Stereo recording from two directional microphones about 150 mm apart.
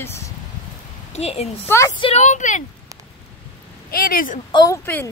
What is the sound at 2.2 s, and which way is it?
Speech, 55° left (ahead or behind).